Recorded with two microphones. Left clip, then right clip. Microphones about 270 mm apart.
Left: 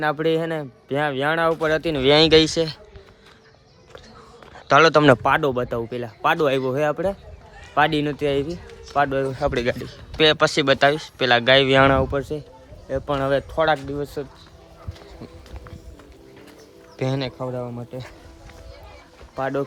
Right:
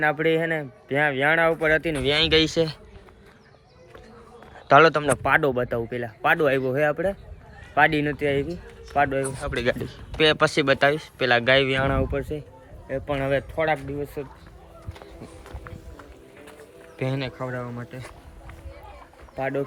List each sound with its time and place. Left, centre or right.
0.0 s speech: centre
2.2 s speech: centre
4.5 s a man's voice: centre
12.1 s speech: centre
17.0 s speech: centre
19.4 s speech: centre